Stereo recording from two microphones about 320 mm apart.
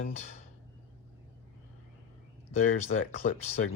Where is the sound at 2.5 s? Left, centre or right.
Left.